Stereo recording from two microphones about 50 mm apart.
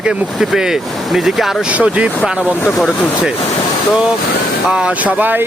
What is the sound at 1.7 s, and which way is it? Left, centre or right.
Speech, right.